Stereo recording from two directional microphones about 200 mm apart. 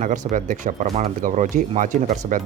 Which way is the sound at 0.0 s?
40° right (ahead or behind).